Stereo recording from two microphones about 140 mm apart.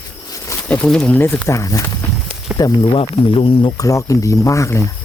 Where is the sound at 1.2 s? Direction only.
15° left (ahead or behind); by 3.5 s 40° left (ahead or behind).